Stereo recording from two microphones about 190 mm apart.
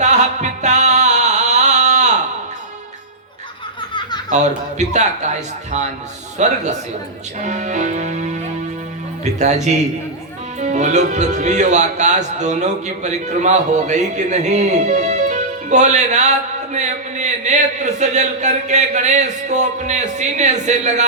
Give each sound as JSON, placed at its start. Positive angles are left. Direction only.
{"t": 0.0, "sound": "music", "side_deg": -40}
{"t": 4.3, "sound": "speech", "side_deg": -40}